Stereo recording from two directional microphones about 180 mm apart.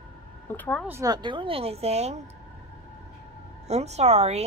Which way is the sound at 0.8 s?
15° right (ahead or behind).